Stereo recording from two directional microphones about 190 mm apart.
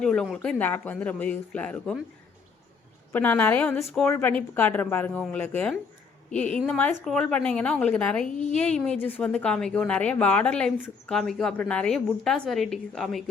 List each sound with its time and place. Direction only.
0.0 s a man's voice: 5° left (ahead or behind)
3.1 s a man's voice: 10° left (ahead or behind)
8.3 s a woman's voice: 40° left (ahead or behind)
8.5 s a woman's voice: 5° left (ahead or behind)